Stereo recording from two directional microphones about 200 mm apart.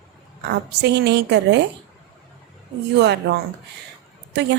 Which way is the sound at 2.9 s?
60° right (ahead or behind).